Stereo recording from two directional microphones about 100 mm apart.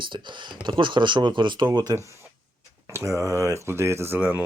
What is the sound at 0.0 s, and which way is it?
Speech, 50° right (ahead or behind).